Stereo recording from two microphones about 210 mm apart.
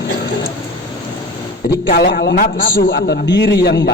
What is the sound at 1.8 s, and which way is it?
A man's voice, 45° left (ahead or behind).